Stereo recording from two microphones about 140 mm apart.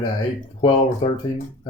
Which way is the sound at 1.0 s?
40° left (ahead or behind).